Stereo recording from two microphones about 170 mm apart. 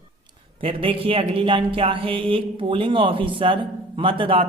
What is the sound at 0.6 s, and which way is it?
Speech, 30° right (ahead or behind).